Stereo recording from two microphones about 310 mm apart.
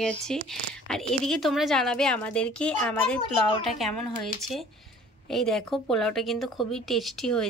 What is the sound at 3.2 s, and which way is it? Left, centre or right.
Speech, centre.